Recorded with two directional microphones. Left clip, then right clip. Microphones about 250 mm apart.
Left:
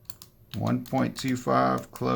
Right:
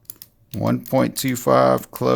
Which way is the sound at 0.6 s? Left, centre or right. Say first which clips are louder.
Right 8 dB; right.